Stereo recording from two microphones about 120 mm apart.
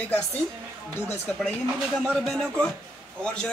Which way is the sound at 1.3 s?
10° left (ahead or behind).